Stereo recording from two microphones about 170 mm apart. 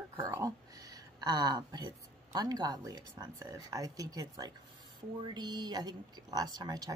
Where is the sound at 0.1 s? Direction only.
25° right (ahead or behind).